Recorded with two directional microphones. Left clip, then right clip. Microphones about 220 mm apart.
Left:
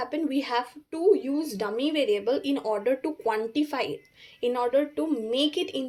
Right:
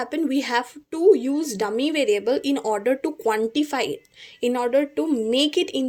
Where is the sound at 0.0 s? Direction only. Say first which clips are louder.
Right 4 dB; 45° right (ahead or behind).